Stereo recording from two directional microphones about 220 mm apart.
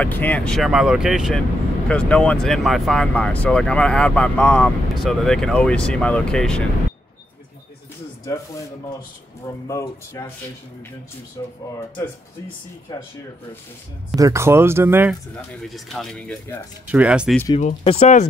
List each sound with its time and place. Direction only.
0.0 s speech: 5° left (ahead or behind)
9.5 s speech: 15° left (ahead or behind)
11.4 s speech: 15° left (ahead or behind)
12.9 s speech: 15° left (ahead or behind)
14.1 s speech: 15° right (ahead or behind)
15.7 s speech: centre (ahead or behind)
16.8 s speech: 5° right (ahead or behind)
17.6 s speech: 30° left (ahead or behind)